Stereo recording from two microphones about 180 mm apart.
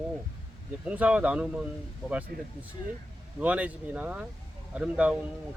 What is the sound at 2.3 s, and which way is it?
Speech, 60° right (ahead or behind).